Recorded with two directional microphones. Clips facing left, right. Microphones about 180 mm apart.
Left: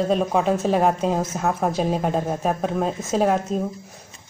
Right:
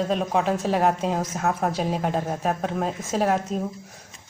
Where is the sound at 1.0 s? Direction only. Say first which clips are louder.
Left 3 dB; 25° left (ahead or behind).